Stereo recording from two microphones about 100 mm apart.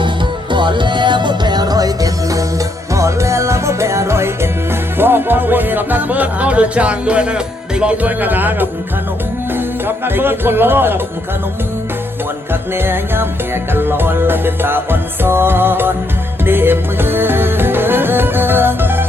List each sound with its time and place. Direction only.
0.5 s music: 50° right (ahead or behind); by 8.7 s 20° right (ahead or behind)
9.8 s music: 20° right (ahead or behind)
12.7 s music: 20° right (ahead or behind)